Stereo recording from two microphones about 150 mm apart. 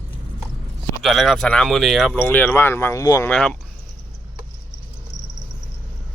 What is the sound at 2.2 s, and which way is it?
Speech, 10° left (ahead or behind).